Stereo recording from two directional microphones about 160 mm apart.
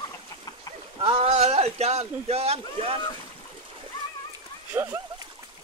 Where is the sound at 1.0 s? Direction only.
35° right (ahead or behind).